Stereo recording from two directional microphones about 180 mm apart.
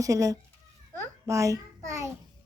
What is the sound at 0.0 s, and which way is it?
A child's voice, 20° right (ahead or behind).